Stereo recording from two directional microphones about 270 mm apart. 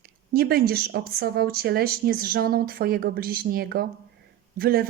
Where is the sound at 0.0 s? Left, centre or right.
Right.